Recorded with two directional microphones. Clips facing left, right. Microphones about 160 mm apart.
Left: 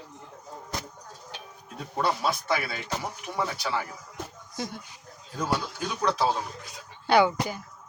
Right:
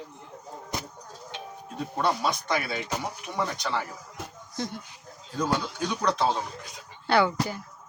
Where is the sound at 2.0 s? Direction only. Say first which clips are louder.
Even; centre (ahead or behind).